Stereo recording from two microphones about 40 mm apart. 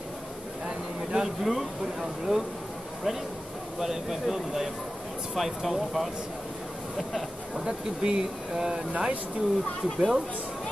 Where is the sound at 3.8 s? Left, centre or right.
Centre.